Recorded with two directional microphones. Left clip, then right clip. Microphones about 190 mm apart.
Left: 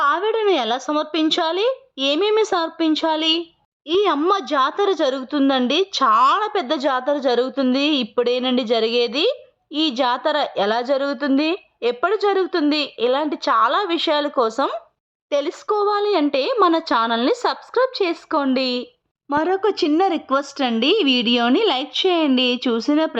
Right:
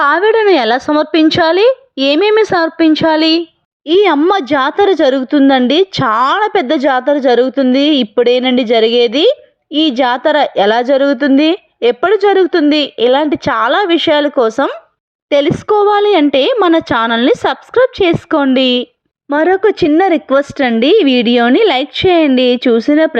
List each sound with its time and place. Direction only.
0.0 s a woman's voice: 20° right (ahead or behind)